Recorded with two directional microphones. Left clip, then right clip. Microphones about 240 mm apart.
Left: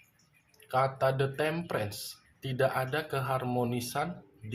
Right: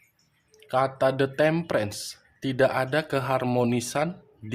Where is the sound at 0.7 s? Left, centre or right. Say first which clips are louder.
Right 5 dB; right.